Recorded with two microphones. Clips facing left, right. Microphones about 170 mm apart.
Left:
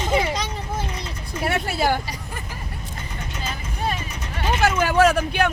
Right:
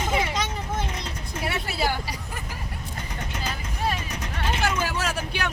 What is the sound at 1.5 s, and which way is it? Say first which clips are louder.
Speech: left 6 dB; 50° left (ahead or behind).